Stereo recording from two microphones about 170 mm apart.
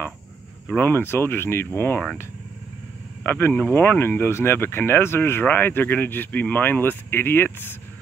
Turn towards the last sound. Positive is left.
turn(degrees=10)  # may be behind; listen again after turning